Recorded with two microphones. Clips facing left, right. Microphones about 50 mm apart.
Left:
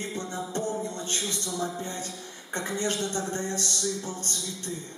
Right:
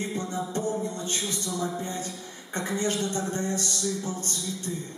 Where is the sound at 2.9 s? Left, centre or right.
Centre.